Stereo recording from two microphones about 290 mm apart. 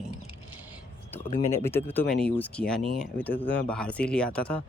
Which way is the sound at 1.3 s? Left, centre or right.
Left.